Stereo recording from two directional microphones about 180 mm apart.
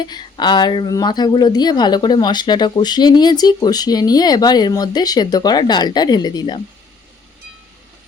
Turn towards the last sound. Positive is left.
turn(degrees=25)  # may be behind; listen again after turning